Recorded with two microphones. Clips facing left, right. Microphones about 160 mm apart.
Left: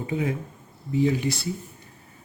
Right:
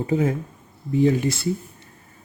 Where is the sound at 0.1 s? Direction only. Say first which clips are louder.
Right 5 dB; 40° right (ahead or behind).